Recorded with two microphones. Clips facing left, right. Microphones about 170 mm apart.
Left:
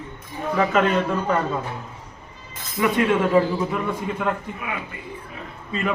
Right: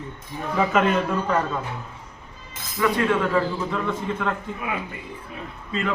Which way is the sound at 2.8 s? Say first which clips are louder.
Left 2 dB; 20° left (ahead or behind).